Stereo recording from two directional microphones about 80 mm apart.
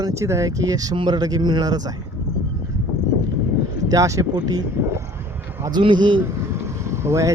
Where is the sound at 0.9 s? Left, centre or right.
Right.